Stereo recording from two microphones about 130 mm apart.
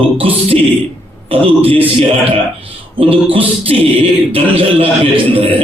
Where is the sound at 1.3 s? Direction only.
45° right (ahead or behind).